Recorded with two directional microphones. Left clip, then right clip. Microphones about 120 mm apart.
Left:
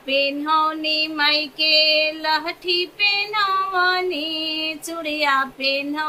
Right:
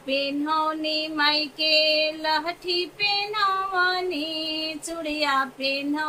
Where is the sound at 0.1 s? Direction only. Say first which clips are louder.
Left 5 dB; 20° left (ahead or behind).